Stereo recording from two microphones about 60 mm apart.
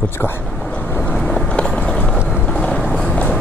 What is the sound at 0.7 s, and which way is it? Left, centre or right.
Vehicle, left.